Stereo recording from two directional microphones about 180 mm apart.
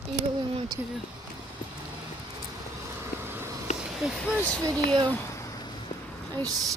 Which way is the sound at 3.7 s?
40° left (ahead or behind).